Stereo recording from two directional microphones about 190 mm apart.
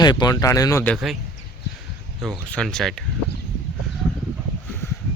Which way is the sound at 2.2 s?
5° left (ahead or behind).